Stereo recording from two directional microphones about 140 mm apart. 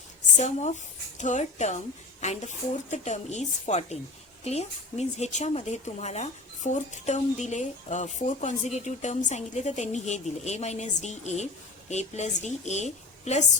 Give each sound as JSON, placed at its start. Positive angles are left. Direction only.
{"t": 0.3, "sound": "a woman's voice", "side_deg": 55}